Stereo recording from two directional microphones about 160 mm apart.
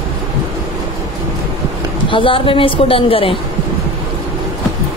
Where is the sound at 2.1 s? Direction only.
30° left (ahead or behind).